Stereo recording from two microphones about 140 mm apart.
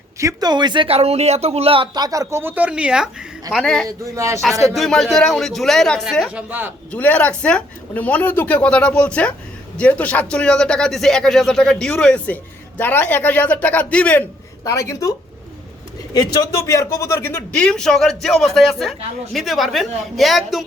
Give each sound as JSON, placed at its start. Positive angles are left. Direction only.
{"t": 0.2, "sound": "a man's voice", "side_deg": -25}
{"t": 3.8, "sound": "speech", "side_deg": -20}
{"t": 4.6, "sound": "a man's voice", "side_deg": 0}
{"t": 6.3, "sound": "a man's voice", "side_deg": -10}
{"t": 6.9, "sound": "speech", "side_deg": 10}
{"t": 14.6, "sound": "speech", "side_deg": 25}
{"t": 16.1, "sound": "speech", "side_deg": 25}
{"t": 17.6, "sound": "a man's voice", "side_deg": 5}